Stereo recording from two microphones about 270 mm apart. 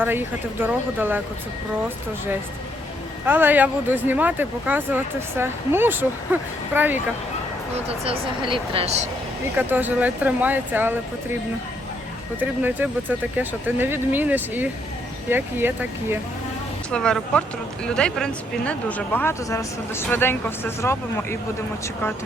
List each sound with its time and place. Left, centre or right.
0.0 s speech: centre
3.2 s speech: centre
7.9 s speech: right
9.6 s speech: centre
12.4 s speech: centre
16.9 s speech: centre